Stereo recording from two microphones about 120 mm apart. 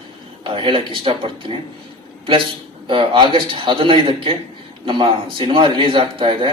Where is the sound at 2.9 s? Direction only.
45° right (ahead or behind).